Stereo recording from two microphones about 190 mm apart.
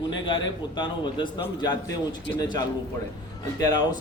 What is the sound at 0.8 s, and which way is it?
Speech, 25° left (ahead or behind).